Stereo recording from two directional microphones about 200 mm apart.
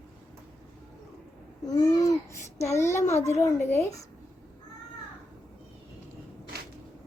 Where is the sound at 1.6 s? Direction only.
20° left (ahead or behind).